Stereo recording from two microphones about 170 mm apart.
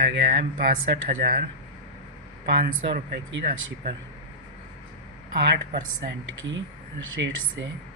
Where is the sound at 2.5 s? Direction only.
55° right (ahead or behind).